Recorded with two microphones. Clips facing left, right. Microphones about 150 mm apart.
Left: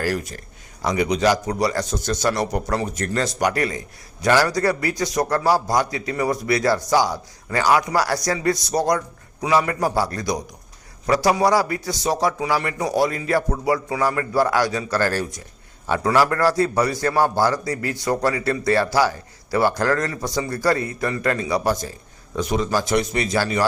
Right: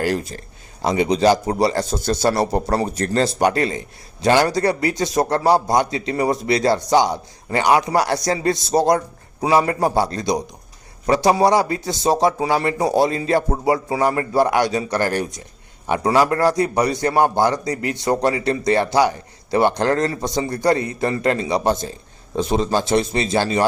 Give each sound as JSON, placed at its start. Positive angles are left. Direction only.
{"t": 0.0, "sound": "a man's voice", "side_deg": -25}